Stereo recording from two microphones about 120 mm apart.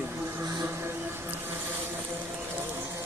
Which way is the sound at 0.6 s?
20° right (ahead or behind).